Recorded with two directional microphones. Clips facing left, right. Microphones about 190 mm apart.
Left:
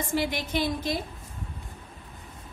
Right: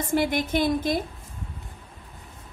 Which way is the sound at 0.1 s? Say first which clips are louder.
Right 6 dB; 50° right (ahead or behind).